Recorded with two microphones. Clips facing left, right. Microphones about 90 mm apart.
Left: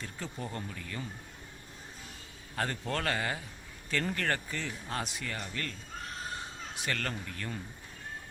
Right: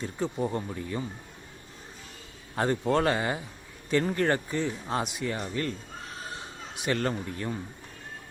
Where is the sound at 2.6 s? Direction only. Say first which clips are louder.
Right 9 dB; 20° right (ahead or behind).